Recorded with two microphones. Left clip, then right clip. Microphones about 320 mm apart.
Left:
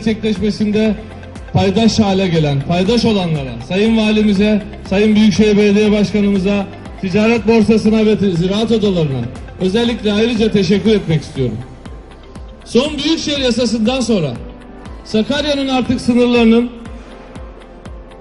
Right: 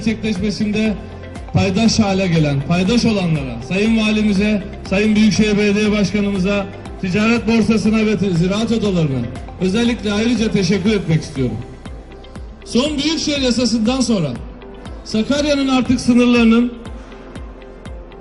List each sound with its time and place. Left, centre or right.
0.0 s a man's voice: left
12.7 s a man's voice: left